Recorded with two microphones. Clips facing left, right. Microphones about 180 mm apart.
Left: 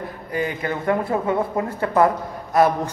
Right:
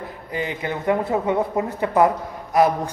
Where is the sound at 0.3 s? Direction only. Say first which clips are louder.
Left 2 dB; 20° right (ahead or behind).